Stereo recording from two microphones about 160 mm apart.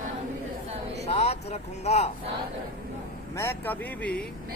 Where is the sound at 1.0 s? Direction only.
45° left (ahead or behind).